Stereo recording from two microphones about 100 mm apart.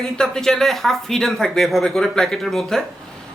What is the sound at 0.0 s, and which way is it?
Speech, 5° left (ahead or behind).